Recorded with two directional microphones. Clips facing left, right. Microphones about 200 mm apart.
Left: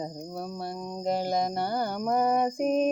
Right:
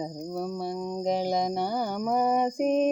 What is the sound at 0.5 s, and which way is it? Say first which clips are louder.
Cricket: right 4 dB; 10° right (ahead or behind).